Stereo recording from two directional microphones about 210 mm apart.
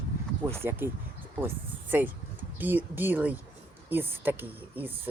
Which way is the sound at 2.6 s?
10° right (ahead or behind).